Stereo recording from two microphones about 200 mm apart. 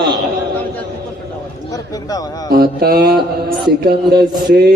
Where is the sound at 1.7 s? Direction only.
20° left (ahead or behind).